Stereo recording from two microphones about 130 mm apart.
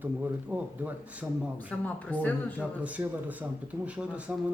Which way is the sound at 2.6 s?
10° right (ahead or behind).